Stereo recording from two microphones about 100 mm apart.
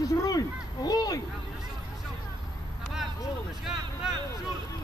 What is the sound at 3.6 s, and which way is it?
Speech, 5° right (ahead or behind).